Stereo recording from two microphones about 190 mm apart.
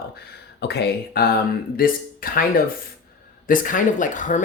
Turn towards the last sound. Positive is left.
turn(degrees=40)  # may be behind; listen again after turning